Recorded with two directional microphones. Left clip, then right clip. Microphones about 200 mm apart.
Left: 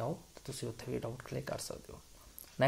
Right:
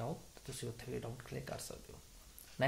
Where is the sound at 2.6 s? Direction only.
40° left (ahead or behind).